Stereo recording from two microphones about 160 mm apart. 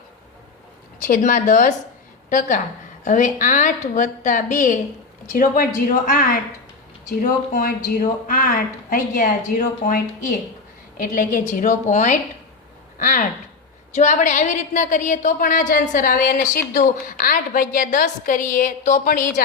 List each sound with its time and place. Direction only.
1.0 s a woman's voice: 55° left (ahead or behind)
3.0 s a woman's voice: 50° left (ahead or behind)